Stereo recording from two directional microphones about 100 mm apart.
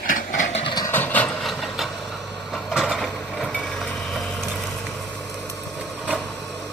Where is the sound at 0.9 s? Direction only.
20° left (ahead or behind).